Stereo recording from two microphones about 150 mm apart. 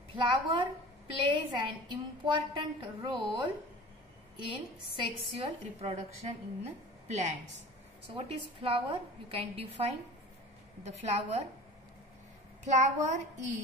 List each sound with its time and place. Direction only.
0.1 s a woman's voice: 35° right (ahead or behind)
4.9 s a woman's voice: 35° right (ahead or behind)
8.1 s a woman's voice: 35° right (ahead or behind)
10.8 s a woman's voice: 50° right (ahead or behind)
12.6 s a woman's voice: 50° right (ahead or behind)